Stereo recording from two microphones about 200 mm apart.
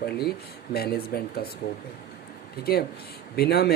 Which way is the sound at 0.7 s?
50° left (ahead or behind).